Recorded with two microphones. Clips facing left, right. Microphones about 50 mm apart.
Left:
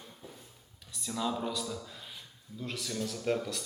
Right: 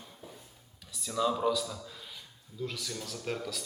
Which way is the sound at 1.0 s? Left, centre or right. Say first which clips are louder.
Right 4 dB; centre.